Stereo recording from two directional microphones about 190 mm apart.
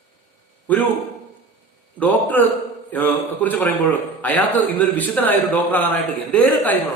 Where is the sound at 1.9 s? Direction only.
10° left (ahead or behind).